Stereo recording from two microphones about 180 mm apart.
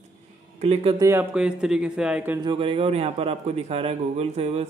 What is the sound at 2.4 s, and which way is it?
A man's voice, 30° right (ahead or behind).